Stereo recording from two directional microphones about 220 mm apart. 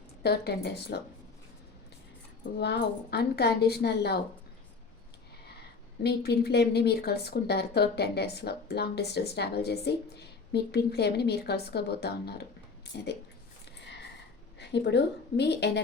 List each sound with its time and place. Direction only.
0.2 s speech: 45° left (ahead or behind)
2.6 s speech: 50° left (ahead or behind)
6.0 s speech: 50° left (ahead or behind)
14.6 s speech: 50° left (ahead or behind)